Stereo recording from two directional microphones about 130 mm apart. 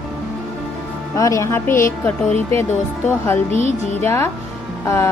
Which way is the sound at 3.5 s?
65° left (ahead or behind).